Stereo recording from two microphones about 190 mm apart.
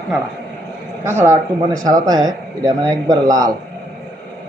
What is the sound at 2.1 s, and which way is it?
A man's voice, 20° right (ahead or behind).